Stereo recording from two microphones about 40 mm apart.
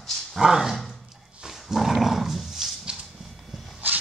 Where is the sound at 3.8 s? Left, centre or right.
Right.